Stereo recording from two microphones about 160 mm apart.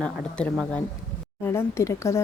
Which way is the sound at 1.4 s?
15° left (ahead or behind).